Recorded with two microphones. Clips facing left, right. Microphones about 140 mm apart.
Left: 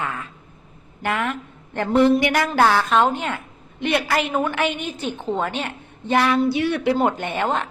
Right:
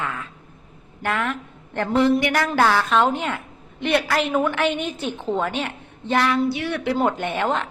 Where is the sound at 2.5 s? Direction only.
5° left (ahead or behind).